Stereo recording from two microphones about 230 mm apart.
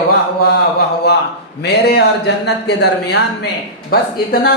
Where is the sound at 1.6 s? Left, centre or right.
Left.